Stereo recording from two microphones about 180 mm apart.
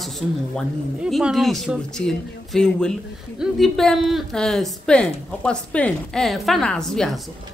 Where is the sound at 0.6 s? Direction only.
Centre (ahead or behind).